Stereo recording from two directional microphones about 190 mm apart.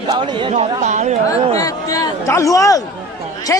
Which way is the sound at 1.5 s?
20° left (ahead or behind).